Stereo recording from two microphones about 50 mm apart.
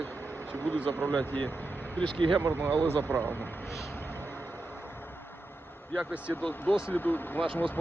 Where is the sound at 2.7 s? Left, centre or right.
Left.